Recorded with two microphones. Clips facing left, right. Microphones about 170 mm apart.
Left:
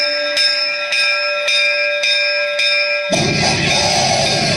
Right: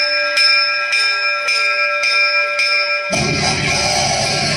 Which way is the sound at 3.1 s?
25° left (ahead or behind).